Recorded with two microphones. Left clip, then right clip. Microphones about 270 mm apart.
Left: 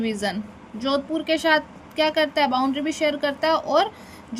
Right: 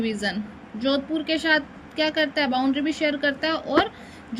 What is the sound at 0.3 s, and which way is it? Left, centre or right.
A woman's voice, left.